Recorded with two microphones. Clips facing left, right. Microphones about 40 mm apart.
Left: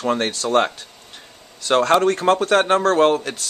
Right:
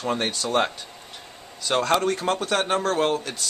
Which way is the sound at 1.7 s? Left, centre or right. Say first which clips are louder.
Left 6 dB; centre.